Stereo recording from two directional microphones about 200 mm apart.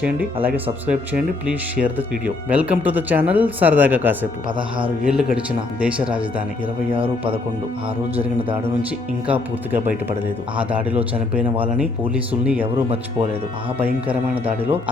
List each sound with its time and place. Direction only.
0.4 s speech: 5° right (ahead or behind)
4.4 s a man's voice: 25° right (ahead or behind)
5.0 s speech: 5° right (ahead or behind)
6.9 s a man's voice: 25° right (ahead or behind)
9.2 s speech: 10° right (ahead or behind)
13.7 s speech: 10° right (ahead or behind)